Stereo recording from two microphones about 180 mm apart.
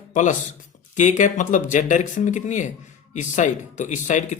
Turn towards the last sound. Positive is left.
turn(degrees=40)  # may be behind; listen again after turning